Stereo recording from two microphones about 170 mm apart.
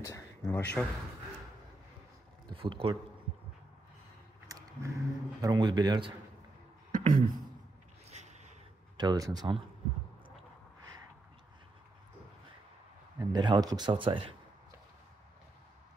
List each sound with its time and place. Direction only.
0.0 s a sound: 15° left (ahead or behind)
2.5 s speech: 30° right (ahead or behind)
4.5 s a man's voice: 20° right (ahead or behind)
6.9 s beatboxing: 50° right (ahead or behind)
8.1 s a sound: 40° right (ahead or behind)
8.9 s a man's voice: 25° right (ahead or behind)
13.2 s a man's voice: 25° right (ahead or behind)